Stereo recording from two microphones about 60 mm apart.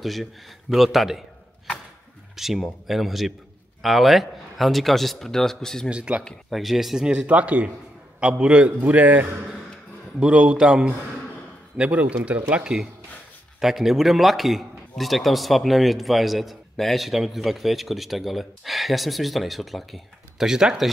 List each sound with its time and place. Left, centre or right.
0.0 s a man's voice: centre
2.3 s a man's voice: centre
5.9 s a man's voice: centre
6.5 s a man's voice: centre
7.1 s a man's voice: right
13.6 s a man's voice: centre